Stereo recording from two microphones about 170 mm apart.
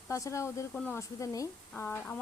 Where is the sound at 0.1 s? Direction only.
15° left (ahead or behind).